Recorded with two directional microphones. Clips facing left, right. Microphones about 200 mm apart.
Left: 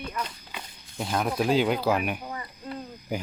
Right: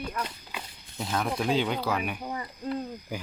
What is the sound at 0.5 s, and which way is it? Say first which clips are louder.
Speech: left 1 dB; centre (ahead or behind).